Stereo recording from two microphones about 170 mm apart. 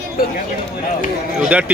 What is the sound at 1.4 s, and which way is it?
Speech, 10° right (ahead or behind).